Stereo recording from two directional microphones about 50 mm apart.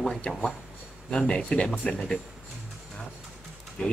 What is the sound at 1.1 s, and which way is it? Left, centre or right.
Speech, centre.